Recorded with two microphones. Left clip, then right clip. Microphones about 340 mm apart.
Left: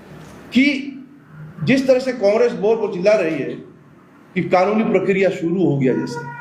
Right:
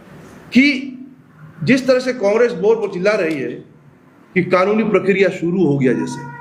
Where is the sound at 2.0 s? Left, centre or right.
Right.